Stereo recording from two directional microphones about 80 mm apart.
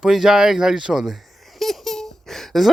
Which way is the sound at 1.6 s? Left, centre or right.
Centre.